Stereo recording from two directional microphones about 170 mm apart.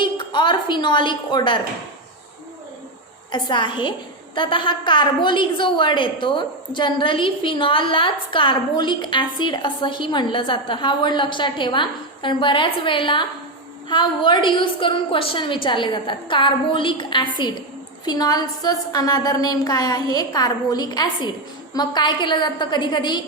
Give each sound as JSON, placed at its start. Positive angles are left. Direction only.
{"t": 0.0, "sound": "a woman's voice", "side_deg": 30}
{"t": 3.3, "sound": "a woman's voice", "side_deg": 25}